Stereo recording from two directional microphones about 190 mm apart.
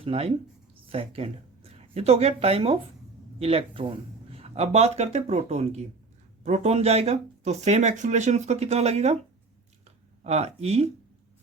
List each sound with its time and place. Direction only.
0.0 s speech: 30° right (ahead or behind)
10.2 s speech: 35° right (ahead or behind)